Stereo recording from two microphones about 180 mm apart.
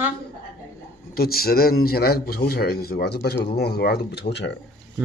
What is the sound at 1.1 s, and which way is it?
A man's voice, 55° left (ahead or behind).